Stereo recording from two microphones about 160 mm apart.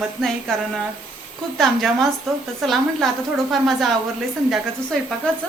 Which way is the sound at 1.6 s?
Centre (ahead or behind).